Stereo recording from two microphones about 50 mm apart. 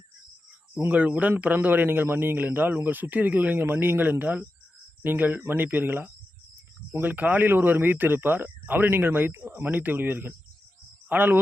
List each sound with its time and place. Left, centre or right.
0.9 s speech: right
5.4 s speech: right